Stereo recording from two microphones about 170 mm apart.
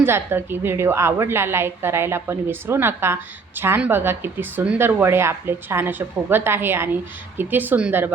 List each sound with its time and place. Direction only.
0.0 s a woman's voice: 15° right (ahead or behind)